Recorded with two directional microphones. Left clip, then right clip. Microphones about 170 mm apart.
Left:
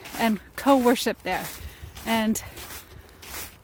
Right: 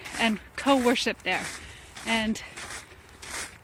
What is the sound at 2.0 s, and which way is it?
Speech, 30° left (ahead or behind).